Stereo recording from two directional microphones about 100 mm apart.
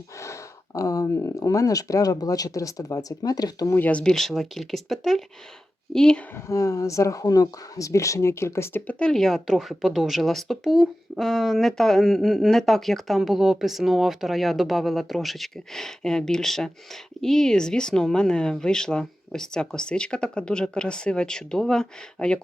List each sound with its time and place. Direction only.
0.2 s speech: 30° left (ahead or behind)
3.8 s speech: 15° left (ahead or behind)
6.3 s speech: 35° left (ahead or behind)
8.9 s speech: 10° left (ahead or behind)